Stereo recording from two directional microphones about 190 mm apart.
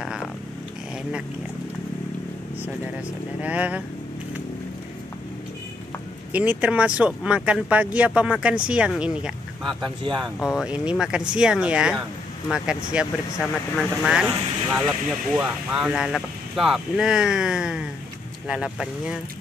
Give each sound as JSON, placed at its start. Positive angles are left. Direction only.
{"t": 0.0, "sound": "a sound", "side_deg": 0}
{"t": 3.3, "sound": "speech", "side_deg": -5}
{"t": 6.3, "sound": "speech", "side_deg": -10}
{"t": 10.0, "sound": "speech", "side_deg": -20}
{"t": 10.4, "sound": "speech", "side_deg": -5}